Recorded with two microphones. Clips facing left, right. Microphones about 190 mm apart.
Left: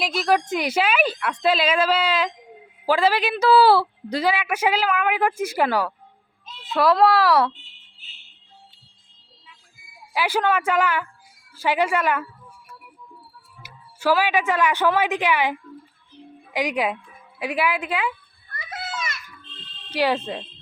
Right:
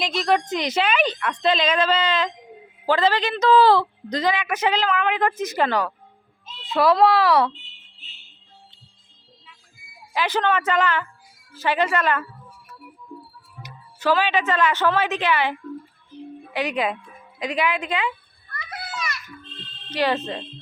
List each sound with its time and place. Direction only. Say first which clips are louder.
0.0 s a child's voice: even; 5° left (ahead or behind)
10.1 s speech: even; 10° left (ahead or behind)
13.6 s a woman's voice: even; 10° left (ahead or behind)
18.5 s children playing: left 1 dB; 25° left (ahead or behind)
19.9 s speech: left 1 dB; 10° left (ahead or behind)